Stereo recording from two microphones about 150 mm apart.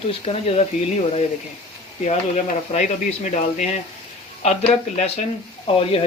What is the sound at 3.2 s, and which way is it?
Speech, 50° left (ahead or behind).